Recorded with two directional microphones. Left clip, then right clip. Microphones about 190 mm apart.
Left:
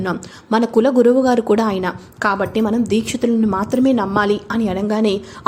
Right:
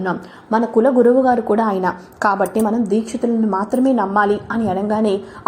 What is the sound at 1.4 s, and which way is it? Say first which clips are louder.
Speech: left 1 dB; 40° left (ahead or behind).